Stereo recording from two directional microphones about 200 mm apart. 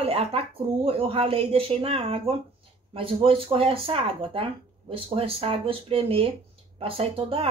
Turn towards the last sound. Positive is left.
turn(degrees=-30)  # may be behind; listen again after turning